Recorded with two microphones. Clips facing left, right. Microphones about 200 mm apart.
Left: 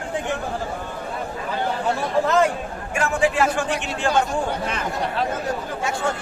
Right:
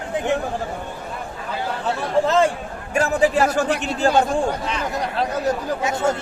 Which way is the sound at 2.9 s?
40° right (ahead or behind).